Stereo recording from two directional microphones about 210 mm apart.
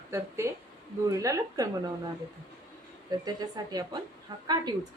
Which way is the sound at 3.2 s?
20° right (ahead or behind).